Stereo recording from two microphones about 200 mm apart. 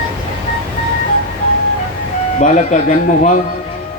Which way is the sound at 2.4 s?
40° left (ahead or behind).